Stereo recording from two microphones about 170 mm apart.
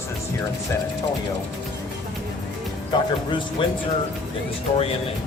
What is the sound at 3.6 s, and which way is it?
Speech, 30° left (ahead or behind).